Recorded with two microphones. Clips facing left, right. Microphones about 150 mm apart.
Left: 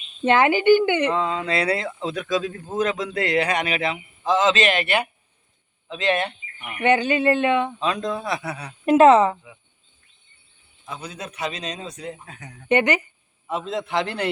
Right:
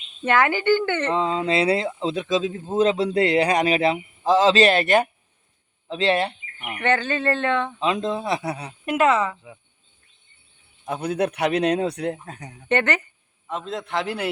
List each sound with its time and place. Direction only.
0.3 s speech: 20° left (ahead or behind)
1.1 s speech: 25° right (ahead or behind)
6.7 s speech: 15° left (ahead or behind)
7.8 s speech: 20° right (ahead or behind)
8.9 s speech: 30° left (ahead or behind)
10.8 s speech: 60° right (ahead or behind)
12.2 s speech: 40° right (ahead or behind)
12.6 s a man's voice: 10° left (ahead or behind); by 14.3 s 5° right (ahead or behind)